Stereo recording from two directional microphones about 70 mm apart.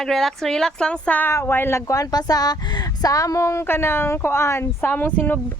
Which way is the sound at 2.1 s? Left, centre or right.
Left.